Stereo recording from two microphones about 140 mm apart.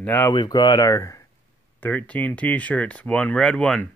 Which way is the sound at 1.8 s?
10° left (ahead or behind).